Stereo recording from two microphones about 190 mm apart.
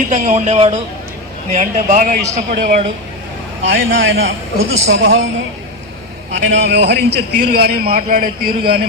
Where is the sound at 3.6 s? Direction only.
80° right.